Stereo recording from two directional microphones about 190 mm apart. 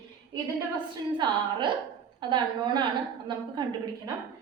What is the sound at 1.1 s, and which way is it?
A woman's voice, 25° right (ahead or behind).